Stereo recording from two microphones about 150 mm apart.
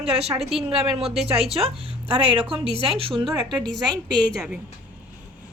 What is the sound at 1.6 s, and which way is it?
Speech, 40° right (ahead or behind).